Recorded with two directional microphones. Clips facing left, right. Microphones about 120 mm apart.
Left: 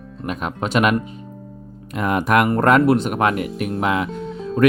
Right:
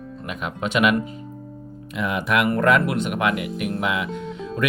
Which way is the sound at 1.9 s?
45° left (ahead or behind).